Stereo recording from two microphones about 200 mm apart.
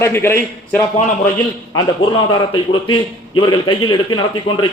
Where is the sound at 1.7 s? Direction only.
25° left (ahead or behind).